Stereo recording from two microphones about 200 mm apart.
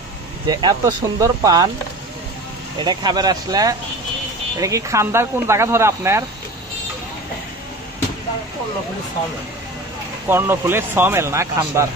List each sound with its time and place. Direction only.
0.5 s speech: 20° right (ahead or behind)
2.8 s speech: 20° right (ahead or behind)
10.2 s speech: 10° right (ahead or behind)